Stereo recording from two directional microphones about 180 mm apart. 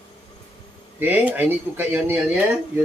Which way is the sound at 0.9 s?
10° right (ahead or behind).